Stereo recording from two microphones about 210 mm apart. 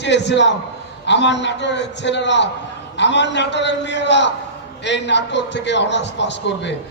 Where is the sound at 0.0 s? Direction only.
55° left (ahead or behind).